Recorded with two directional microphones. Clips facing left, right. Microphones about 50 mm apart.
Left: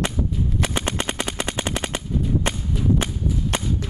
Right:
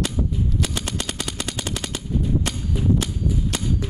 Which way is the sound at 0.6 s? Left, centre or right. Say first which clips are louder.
Left 3 dB; left.